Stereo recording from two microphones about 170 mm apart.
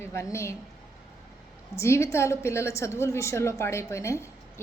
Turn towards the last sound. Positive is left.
turn(degrees=15)  # may be behind; listen again after turning